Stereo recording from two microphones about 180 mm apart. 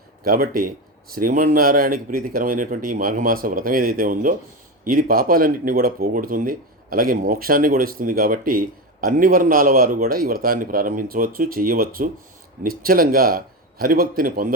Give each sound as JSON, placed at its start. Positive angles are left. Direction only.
{"t": 0.3, "sound": "speech", "side_deg": -55}